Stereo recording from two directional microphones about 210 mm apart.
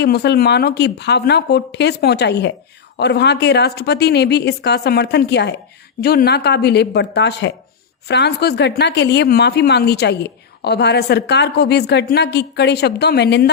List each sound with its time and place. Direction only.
0.0 s a woman's voice: 50° left (ahead or behind)